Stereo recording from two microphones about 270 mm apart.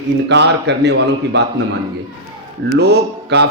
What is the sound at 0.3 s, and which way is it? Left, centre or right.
Speech, right.